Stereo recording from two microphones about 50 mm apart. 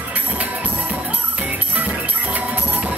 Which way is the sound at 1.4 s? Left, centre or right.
Right.